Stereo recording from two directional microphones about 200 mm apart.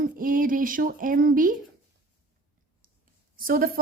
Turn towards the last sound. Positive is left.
turn(degrees=-50)  # may be behind; listen again after turning